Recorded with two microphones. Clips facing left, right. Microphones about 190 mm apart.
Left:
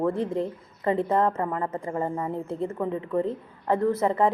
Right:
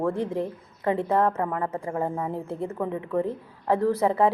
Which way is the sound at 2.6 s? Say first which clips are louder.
Left 1 dB; 10° right (ahead or behind).